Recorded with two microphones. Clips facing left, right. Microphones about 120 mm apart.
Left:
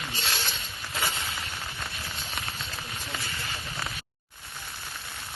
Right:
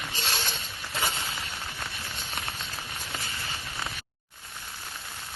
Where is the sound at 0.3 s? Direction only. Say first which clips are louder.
Right 1 dB; 45° right (ahead or behind).